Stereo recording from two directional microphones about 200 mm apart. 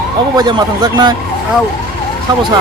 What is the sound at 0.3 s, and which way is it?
Speech, 20° right (ahead or behind).